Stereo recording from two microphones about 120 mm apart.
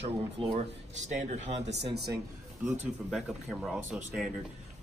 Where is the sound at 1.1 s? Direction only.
75° right (ahead or behind).